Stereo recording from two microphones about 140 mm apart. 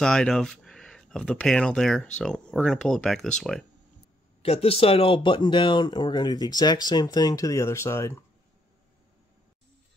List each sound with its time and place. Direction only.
0.0 s speech: 5° left (ahead or behind)
4.4 s speech: 45° left (ahead or behind); by 8.2 s 20° left (ahead or behind)